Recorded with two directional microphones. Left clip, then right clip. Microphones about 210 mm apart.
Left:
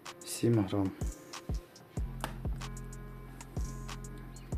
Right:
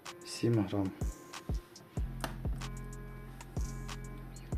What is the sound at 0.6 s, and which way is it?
Speech, 10° left (ahead or behind).